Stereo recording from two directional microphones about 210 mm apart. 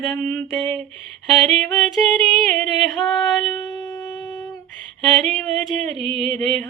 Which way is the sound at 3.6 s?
20° left (ahead or behind).